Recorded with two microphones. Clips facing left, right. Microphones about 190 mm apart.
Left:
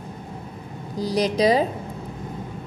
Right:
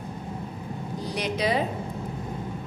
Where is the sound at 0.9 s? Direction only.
35° left (ahead or behind).